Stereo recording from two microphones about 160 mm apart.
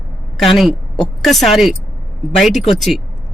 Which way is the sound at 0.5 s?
Centre (ahead or behind).